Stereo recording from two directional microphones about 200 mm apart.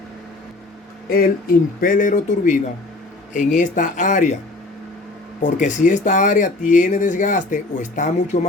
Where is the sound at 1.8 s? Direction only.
40° left (ahead or behind).